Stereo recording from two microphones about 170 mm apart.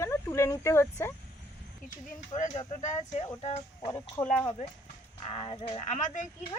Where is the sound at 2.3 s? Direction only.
45° left (ahead or behind).